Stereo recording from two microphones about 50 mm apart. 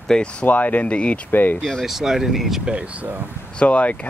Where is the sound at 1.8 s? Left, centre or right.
Centre.